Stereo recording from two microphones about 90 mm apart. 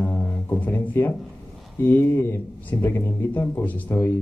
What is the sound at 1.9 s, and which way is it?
A man's voice, 25° left (ahead or behind).